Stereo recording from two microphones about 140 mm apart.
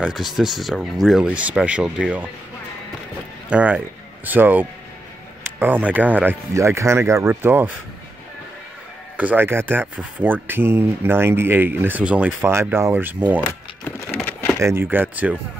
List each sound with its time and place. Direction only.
0.0 s speech: centre (ahead or behind)
3.4 s speech: 10° right (ahead or behind)
9.1 s speech: 10° right (ahead or behind)
14.1 s a sound: 10° left (ahead or behind)
14.6 s speech: 20° right (ahead or behind)